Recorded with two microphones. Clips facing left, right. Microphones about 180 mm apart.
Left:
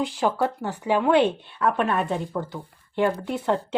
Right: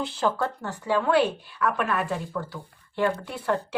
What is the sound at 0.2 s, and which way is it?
Speech, 15° left (ahead or behind).